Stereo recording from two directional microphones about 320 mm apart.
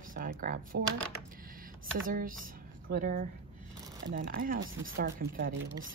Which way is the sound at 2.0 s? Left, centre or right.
Right.